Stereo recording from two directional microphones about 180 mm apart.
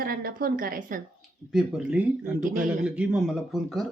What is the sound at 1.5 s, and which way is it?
Speech, 5° right (ahead or behind).